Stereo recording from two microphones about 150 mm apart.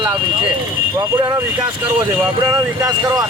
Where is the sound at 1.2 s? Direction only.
25° right (ahead or behind).